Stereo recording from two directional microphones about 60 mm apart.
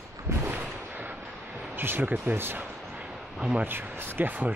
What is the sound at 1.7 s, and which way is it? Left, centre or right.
Speech, right.